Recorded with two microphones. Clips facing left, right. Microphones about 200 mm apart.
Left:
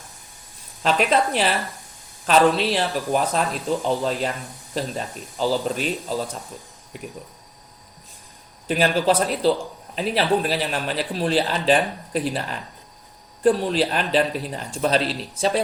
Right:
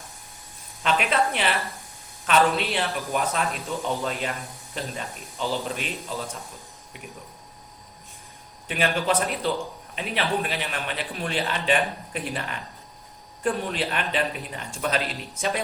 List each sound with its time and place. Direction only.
0.8 s a man's voice: 35° left (ahead or behind)
8.6 s a man's voice: 35° left (ahead or behind)